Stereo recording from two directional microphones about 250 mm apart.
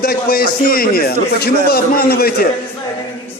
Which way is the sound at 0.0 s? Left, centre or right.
Left.